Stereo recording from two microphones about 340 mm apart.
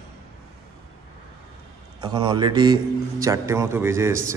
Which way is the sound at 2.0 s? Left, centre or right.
Centre.